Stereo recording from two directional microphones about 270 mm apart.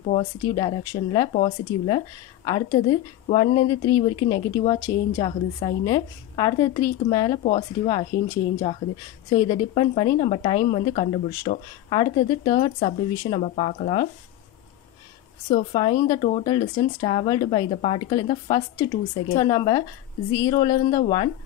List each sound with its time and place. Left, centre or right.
0.0 s a woman's voice: left
9.3 s a woman's voice: centre
15.5 s a woman's voice: centre